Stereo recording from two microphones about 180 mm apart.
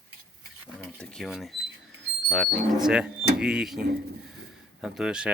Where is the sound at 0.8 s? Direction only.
5° left (ahead or behind).